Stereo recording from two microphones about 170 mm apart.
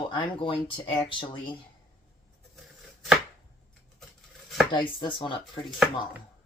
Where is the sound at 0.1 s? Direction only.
30° left (ahead or behind).